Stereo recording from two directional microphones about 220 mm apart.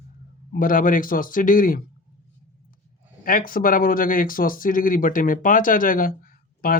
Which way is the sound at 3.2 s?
40° left (ahead or behind).